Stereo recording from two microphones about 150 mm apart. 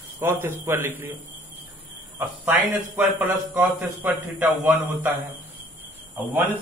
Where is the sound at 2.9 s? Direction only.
5° right (ahead or behind).